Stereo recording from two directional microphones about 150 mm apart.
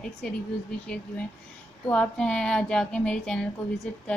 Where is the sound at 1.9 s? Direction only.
5° left (ahead or behind).